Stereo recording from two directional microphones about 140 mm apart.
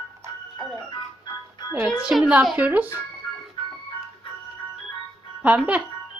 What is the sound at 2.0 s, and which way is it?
Speech, 5° right (ahead or behind).